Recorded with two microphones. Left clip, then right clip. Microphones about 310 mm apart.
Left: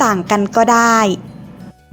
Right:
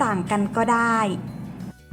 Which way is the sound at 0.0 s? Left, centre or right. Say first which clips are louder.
Left 9 dB; left.